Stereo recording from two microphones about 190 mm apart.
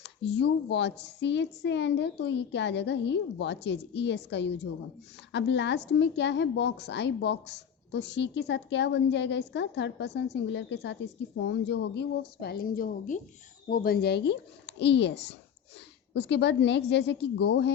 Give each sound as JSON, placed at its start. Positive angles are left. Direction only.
{"t": 0.0, "sound": "a woman's voice", "side_deg": 65}